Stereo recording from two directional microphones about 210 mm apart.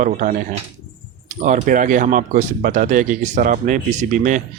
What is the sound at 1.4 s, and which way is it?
Speech, 35° right (ahead or behind).